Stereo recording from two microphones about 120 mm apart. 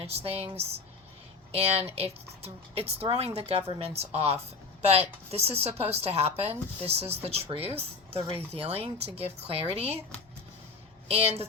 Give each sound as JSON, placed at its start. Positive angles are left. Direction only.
{"t": 0.0, "sound": "speech", "side_deg": -55}
{"t": 11.1, "sound": "speech", "side_deg": -55}